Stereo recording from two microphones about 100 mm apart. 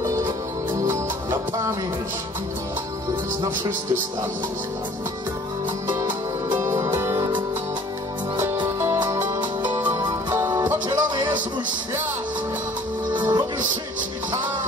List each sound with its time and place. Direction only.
5.9 s music: 25° right (ahead or behind)
8.7 s music: 30° right (ahead or behind)
9.4 s music: 50° right (ahead or behind)
13.1 s music: 50° right (ahead or behind)